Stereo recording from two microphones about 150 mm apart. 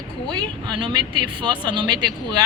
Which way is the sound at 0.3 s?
30° right (ahead or behind).